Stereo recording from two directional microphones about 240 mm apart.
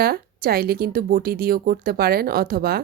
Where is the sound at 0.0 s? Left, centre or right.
Right.